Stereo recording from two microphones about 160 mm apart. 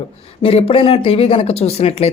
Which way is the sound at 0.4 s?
35° left (ahead or behind).